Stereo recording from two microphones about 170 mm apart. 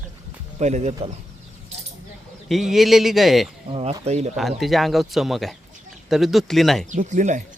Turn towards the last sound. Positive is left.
turn(degrees=-45)  # may be behind; listen again after turning